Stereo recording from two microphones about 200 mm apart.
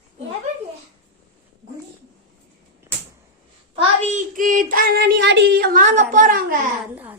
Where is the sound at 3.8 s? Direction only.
35° right (ahead or behind).